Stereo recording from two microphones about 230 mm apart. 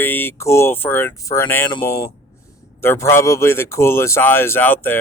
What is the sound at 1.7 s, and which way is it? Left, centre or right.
Speech, centre.